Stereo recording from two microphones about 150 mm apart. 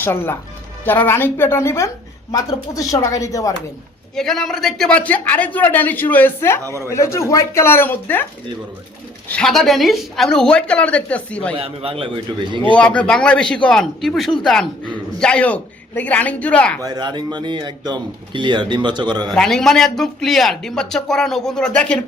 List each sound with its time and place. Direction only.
0.0 s speech: 15° left (ahead or behind)
4.1 s speech: 5° left (ahead or behind)
6.7 s speech: 20° right (ahead or behind)
6.9 s speech: 20° left (ahead or behind)
9.3 s a man's voice: 5° left (ahead or behind)
11.5 s a man's voice: 40° right (ahead or behind)
12.7 s speech: 10° left (ahead or behind)
16.8 s speech: 30° right (ahead or behind)
19.3 s a man's voice: 5° left (ahead or behind)